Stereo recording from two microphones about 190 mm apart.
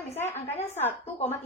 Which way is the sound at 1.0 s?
35° left (ahead or behind).